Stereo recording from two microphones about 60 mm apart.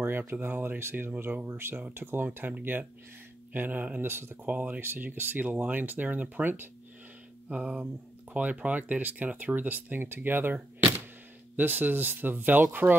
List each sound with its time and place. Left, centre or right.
0.3 s speech: right
7.4 s speech: right